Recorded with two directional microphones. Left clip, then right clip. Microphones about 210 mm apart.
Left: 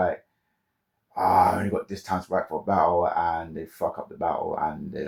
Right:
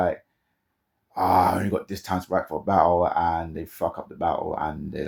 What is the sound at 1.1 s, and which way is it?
Speech, 45° right (ahead or behind).